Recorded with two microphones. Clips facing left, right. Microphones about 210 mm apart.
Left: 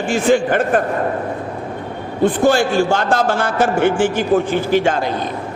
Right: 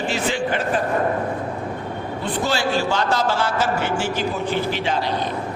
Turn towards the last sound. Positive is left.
turn(degrees=50)  # may be behind; listen again after turning